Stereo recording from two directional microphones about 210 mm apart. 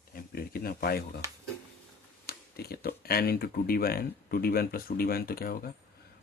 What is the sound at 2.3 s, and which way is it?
Speech, 50° left (ahead or behind).